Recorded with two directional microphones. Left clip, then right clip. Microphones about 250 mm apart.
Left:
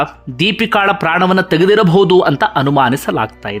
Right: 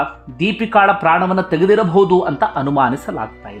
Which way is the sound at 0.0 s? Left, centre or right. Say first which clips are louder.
Left 4 dB; centre.